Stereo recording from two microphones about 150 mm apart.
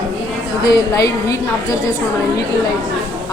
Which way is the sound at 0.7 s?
20° left (ahead or behind).